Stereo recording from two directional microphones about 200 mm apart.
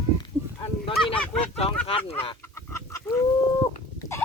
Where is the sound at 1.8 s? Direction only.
30° left (ahead or behind).